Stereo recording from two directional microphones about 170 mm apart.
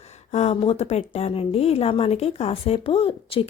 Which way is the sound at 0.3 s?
40° left (ahead or behind).